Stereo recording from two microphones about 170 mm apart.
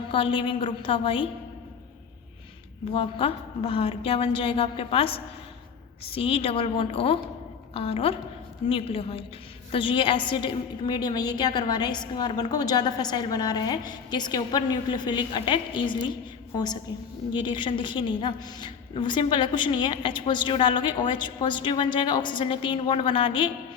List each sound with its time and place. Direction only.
0.1 s a woman's voice: 30° left (ahead or behind)
2.9 s a woman's voice: 30° left (ahead or behind)
17.3 s a woman's voice: 30° left (ahead or behind)